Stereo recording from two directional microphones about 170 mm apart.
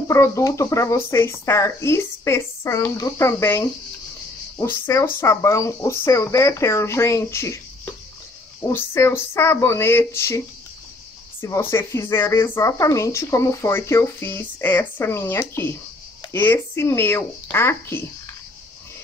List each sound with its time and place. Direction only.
0.1 s speech: 20° left (ahead or behind)
11.4 s speech: 15° left (ahead or behind)